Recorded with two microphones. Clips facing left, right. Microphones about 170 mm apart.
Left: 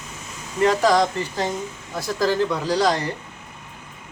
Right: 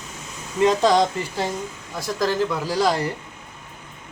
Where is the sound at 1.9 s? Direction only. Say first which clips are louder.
Left 1 dB; centre (ahead or behind).